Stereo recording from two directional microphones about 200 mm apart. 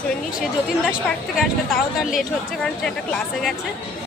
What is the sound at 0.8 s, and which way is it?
A woman's voice, 5° right (ahead or behind).